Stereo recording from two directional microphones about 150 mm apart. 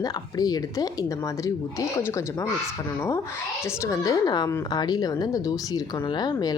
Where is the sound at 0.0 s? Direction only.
25° left (ahead or behind).